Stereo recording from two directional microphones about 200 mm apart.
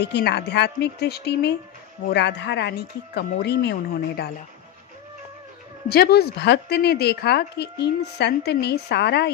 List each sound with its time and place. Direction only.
0.0 s a woman's voice: 55° left (ahead or behind)
5.9 s a woman's voice: 50° left (ahead or behind)